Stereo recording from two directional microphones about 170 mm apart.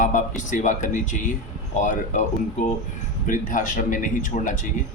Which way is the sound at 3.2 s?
50° left (ahead or behind).